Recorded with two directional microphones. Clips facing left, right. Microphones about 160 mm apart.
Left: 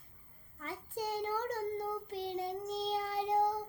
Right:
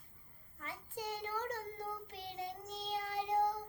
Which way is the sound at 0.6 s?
40° left (ahead or behind).